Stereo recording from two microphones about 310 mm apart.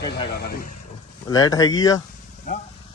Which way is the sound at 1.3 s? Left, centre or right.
Centre.